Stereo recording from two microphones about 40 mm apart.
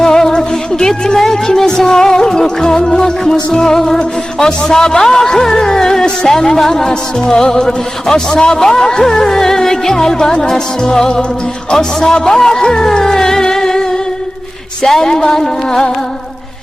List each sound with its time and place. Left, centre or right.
0.0 s music: centre
11.7 s speech: centre
14.8 s music: centre